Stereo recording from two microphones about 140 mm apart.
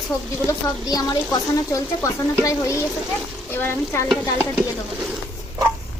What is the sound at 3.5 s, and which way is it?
Stir, 15° left (ahead or behind).